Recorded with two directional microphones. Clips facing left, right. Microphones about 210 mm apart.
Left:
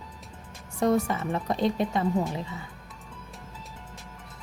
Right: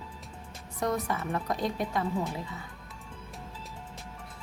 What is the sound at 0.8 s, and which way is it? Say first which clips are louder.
Speech: left 6 dB; 30° left (ahead or behind).